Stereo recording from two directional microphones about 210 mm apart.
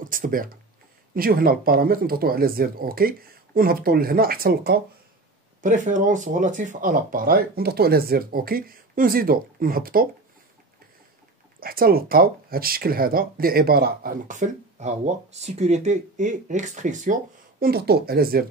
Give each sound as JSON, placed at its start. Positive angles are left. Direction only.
{"t": 0.0, "sound": "speech", "side_deg": -40}
{"t": 11.6, "sound": "speech", "side_deg": -45}